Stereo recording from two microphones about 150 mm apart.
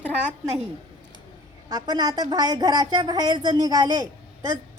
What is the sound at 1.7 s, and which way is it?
A woman's voice, 25° right (ahead or behind).